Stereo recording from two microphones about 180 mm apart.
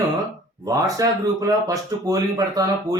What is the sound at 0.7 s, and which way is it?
Speech, 20° right (ahead or behind).